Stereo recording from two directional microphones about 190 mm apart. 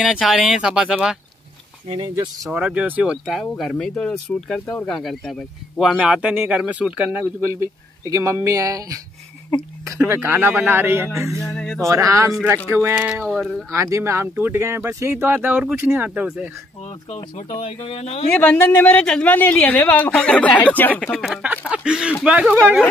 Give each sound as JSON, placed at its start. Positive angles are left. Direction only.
{"t": 0.0, "sound": "speech", "side_deg": -5}
{"t": 1.9, "sound": "speech", "side_deg": -20}
{"t": 2.5, "sound": "speech", "side_deg": -5}
{"t": 11.3, "sound": "speech", "side_deg": 15}
{"t": 11.8, "sound": "speech", "side_deg": -15}
{"t": 13.2, "sound": "speech", "side_deg": 5}
{"t": 13.7, "sound": "speech", "side_deg": -15}
{"t": 17.6, "sound": "speech", "side_deg": 30}
{"t": 18.3, "sound": "speech", "side_deg": 5}